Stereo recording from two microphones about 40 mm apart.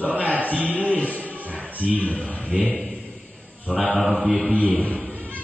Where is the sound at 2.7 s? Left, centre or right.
Centre.